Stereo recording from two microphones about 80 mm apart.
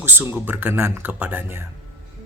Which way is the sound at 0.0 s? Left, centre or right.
Right.